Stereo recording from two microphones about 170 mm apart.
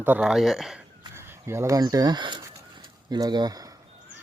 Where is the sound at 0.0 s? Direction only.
10° right (ahead or behind).